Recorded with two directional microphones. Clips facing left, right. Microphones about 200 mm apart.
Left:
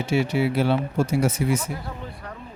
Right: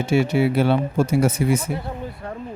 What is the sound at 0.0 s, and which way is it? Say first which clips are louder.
Speech: right 4 dB; 50° right (ahead or behind).